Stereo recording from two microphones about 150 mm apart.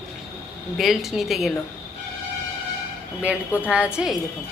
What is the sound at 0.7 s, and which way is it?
Speech, centre (ahead or behind).